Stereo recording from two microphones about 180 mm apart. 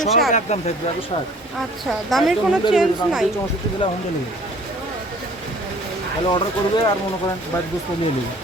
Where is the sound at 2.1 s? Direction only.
Centre (ahead or behind).